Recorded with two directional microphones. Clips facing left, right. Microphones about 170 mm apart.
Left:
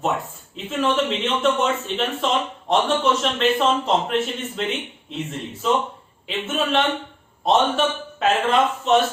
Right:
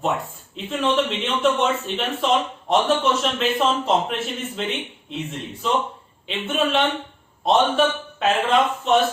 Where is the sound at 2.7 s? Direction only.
Centre (ahead or behind).